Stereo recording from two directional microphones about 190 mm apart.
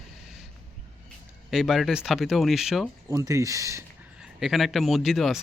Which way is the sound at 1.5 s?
Centre (ahead or behind).